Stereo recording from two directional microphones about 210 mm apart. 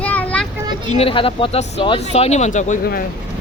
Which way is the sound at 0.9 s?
25° left (ahead or behind).